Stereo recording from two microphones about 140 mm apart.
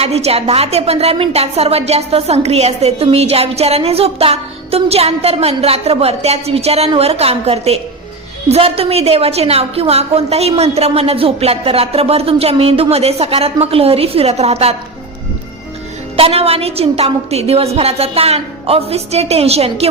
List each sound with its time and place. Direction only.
0.0 s a woman's voice: 50° right (ahead or behind)
16.1 s a woman's voice: 45° right (ahead or behind)